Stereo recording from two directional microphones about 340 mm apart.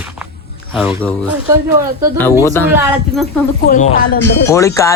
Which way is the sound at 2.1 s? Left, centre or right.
Centre.